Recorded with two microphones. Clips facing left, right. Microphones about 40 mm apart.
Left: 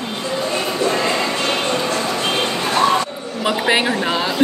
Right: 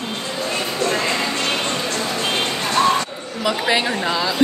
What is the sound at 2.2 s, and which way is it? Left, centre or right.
Vehicle, centre.